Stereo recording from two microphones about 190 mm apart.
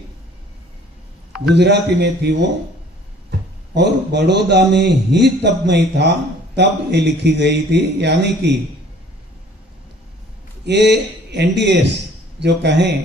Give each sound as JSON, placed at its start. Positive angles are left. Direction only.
{"t": 1.5, "sound": "a man's voice", "side_deg": -65}
{"t": 10.6, "sound": "a man's voice", "side_deg": -65}